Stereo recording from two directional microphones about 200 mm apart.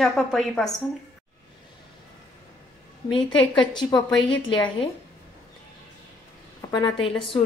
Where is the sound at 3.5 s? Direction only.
25° left (ahead or behind).